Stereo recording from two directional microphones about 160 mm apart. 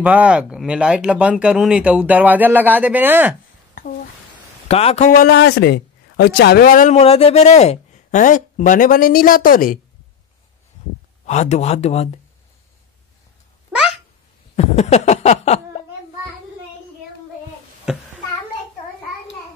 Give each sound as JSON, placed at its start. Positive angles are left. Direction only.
{"t": 0.0, "sound": "speech", "side_deg": -10}
{"t": 4.6, "sound": "speech", "side_deg": 40}
{"t": 5.1, "sound": "a man's voice", "side_deg": 80}
{"t": 7.0, "sound": "speech", "side_deg": 40}
{"t": 11.2, "sound": "speech", "side_deg": 45}
{"t": 13.7, "sound": "a sound", "side_deg": -5}
{"t": 14.5, "sound": "a sound", "side_deg": 40}
{"t": 17.9, "sound": "a child's voice", "side_deg": -5}